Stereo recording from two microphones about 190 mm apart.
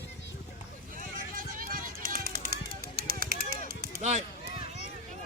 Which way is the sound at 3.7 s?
45° right (ahead or behind).